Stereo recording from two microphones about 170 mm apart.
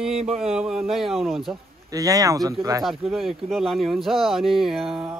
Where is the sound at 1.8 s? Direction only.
20° right (ahead or behind).